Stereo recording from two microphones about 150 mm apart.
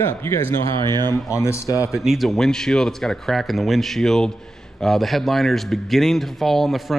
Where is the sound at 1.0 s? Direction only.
20° left (ahead or behind).